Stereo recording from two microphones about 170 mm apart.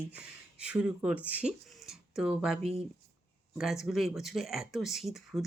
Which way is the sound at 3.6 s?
Centre (ahead or behind).